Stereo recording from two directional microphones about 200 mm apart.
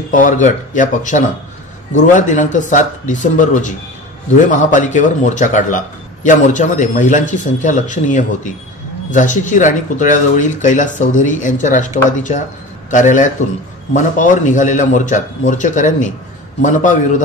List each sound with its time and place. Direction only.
0.1 s a man's voice: 40° left (ahead or behind)